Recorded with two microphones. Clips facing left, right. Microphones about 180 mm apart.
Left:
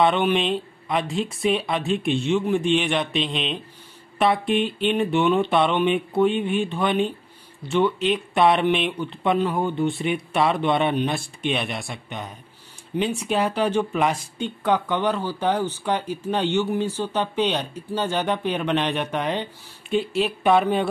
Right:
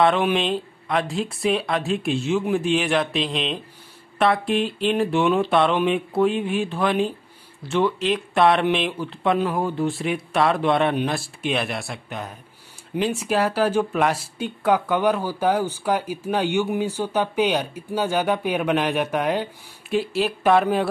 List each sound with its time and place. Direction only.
0.0 s speech: centre (ahead or behind)